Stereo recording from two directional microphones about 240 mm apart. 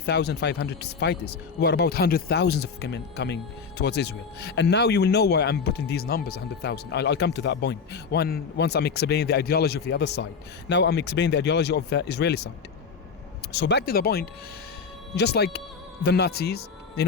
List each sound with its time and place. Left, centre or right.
0.0 s speech: left
13.5 s a man's voice: left